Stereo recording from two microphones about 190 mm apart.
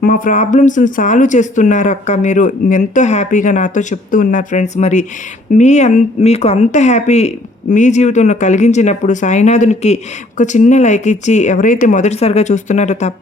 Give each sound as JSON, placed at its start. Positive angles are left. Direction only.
{"t": 0.0, "sound": "speech", "side_deg": 45}